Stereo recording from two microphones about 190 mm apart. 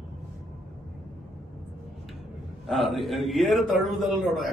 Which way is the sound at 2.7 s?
Centre (ahead or behind).